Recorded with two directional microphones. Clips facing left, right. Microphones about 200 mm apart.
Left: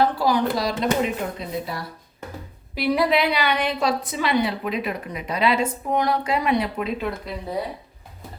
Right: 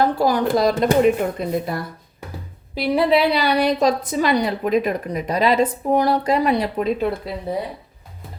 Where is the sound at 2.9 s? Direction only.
30° right (ahead or behind).